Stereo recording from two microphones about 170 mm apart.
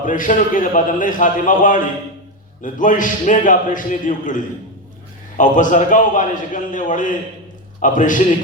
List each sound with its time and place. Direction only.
0.0 s a man's voice: 50° left (ahead or behind)
5.4 s a man's voice: 50° left (ahead or behind)